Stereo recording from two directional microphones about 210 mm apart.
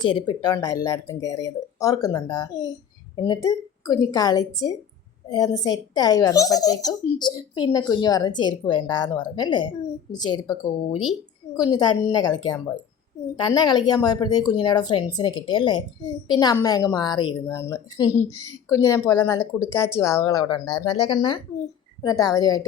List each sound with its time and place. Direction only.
0.0 s a woman's voice: 20° left (ahead or behind)
10.9 s speech: centre (ahead or behind)
11.5 s a woman's voice: 15° left (ahead or behind)
13.4 s a woman's voice: 20° left (ahead or behind)